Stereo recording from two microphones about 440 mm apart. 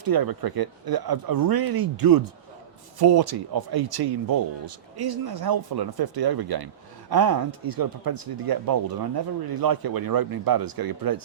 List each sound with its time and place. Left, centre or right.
0.0 s speech: right